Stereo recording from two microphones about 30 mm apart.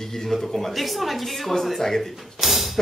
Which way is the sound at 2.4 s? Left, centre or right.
Centre.